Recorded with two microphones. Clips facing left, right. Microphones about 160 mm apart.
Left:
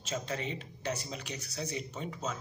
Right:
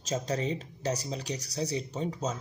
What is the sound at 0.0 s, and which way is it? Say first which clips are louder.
Speech: right 5 dB; 35° right (ahead or behind).